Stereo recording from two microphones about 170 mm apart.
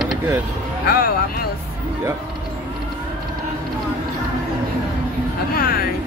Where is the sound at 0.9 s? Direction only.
60° left (ahead or behind).